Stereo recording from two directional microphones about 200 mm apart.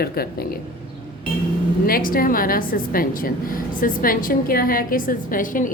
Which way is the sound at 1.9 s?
45° left (ahead or behind).